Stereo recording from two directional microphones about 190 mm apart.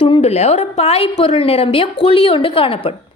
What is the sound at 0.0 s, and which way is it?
A woman's voice, 30° left (ahead or behind).